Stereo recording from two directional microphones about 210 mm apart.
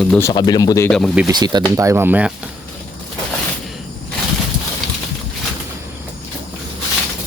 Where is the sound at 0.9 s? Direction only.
5° left (ahead or behind).